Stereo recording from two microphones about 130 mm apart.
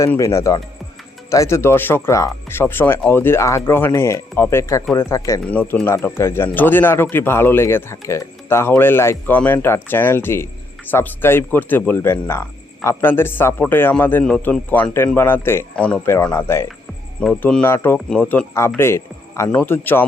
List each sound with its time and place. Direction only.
0.0 s speech: 25° left (ahead or behind)
5.5 s speech: 10° left (ahead or behind)
16.0 s speech: 20° left (ahead or behind)
17.2 s a man's voice: 5° left (ahead or behind)